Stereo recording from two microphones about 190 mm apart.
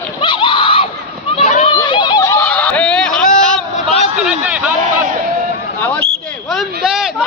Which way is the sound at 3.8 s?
35° left (ahead or behind).